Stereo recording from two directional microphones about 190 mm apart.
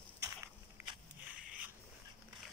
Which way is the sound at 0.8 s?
10° right (ahead or behind).